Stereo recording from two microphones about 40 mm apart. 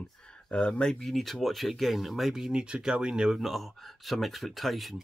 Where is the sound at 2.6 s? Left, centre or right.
Right.